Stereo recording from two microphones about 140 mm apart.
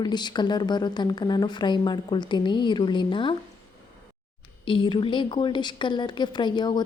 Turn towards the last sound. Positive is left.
turn(degrees=30)  # may be behind; listen again after turning